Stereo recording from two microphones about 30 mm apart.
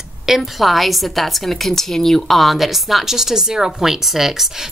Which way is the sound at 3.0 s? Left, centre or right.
Centre.